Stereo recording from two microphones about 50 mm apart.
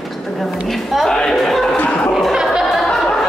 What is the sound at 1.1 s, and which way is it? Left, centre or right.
Speech, centre.